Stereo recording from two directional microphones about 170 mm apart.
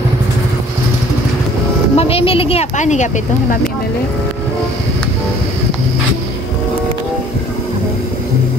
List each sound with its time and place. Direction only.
2.0 s speech: 35° left (ahead or behind)